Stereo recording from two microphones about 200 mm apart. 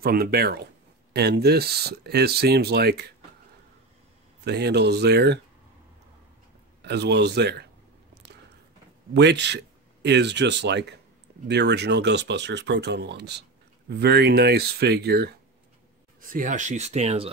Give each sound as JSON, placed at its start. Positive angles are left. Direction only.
{"t": 0.0, "sound": "speech", "side_deg": -50}
{"t": 4.5, "sound": "speech", "side_deg": -55}
{"t": 6.8, "sound": "speech", "side_deg": -55}
{"t": 8.1, "sound": "a sound", "side_deg": -55}
{"t": 9.1, "sound": "speech", "side_deg": -60}
{"t": 16.2, "sound": "speech", "side_deg": -40}